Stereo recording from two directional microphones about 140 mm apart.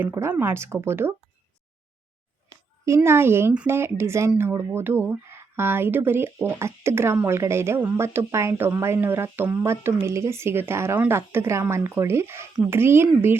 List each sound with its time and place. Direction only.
0.0 s speech: 15° right (ahead or behind)
2.8 s speech: 20° right (ahead or behind)